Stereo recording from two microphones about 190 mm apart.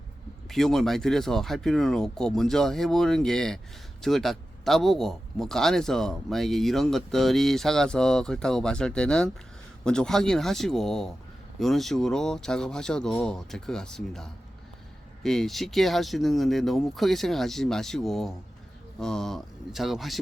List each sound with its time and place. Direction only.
0.4 s speech: centre (ahead or behind)